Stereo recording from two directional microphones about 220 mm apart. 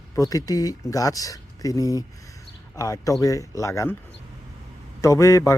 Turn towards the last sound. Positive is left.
turn(degrees=15)  # may be behind; listen again after turning